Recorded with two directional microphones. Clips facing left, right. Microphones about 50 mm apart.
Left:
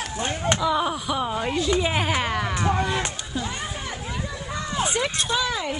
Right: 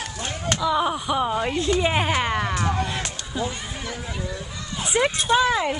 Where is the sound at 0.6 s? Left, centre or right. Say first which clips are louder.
Right 5 dB; centre.